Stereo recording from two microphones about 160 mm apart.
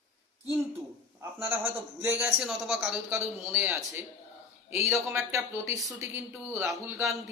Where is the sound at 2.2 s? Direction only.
Centre (ahead or behind).